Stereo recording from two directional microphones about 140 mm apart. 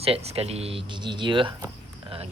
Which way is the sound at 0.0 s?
45° right (ahead or behind).